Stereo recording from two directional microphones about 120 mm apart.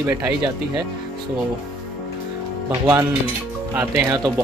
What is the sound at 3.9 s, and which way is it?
Speech, 30° right (ahead or behind).